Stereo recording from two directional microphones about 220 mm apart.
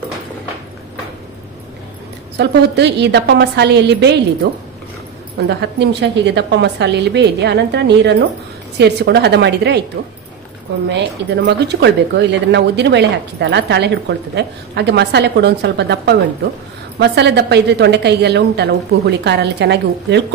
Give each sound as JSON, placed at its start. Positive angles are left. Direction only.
{"t": 2.3, "sound": "speech", "side_deg": -50}
{"t": 5.5, "sound": "speech", "side_deg": -50}
{"t": 10.9, "sound": "speech", "side_deg": -50}